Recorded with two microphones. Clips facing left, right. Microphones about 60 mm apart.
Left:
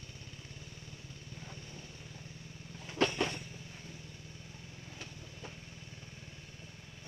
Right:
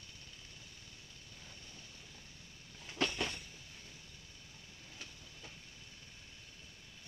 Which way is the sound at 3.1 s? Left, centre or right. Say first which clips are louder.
Left 5 dB; centre.